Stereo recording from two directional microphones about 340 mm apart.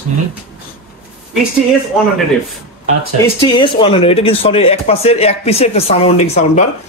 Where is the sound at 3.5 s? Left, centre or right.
Centre.